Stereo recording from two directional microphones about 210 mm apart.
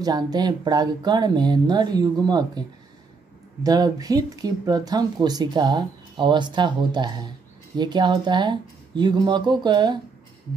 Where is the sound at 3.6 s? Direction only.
20° right (ahead or behind).